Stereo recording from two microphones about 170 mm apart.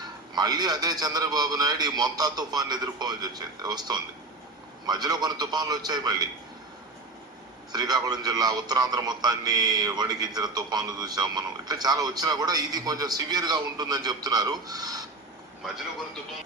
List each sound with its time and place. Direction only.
0.3 s a man's voice: 25° right (ahead or behind)
7.7 s a man's voice: 25° right (ahead or behind)